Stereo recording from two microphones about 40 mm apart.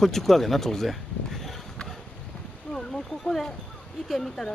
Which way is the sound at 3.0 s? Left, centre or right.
Centre.